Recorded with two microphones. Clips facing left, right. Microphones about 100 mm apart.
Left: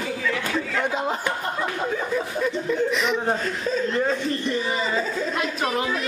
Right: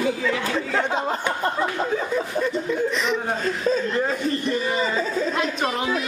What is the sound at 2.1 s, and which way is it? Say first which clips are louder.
A man's voice: right 1 dB; centre (ahead or behind).